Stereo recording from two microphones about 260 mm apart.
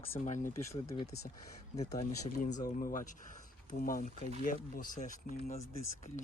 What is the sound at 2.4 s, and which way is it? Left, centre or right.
Speech, left.